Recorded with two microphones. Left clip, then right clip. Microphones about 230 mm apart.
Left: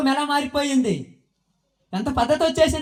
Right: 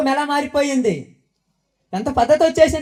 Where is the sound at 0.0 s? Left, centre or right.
Left.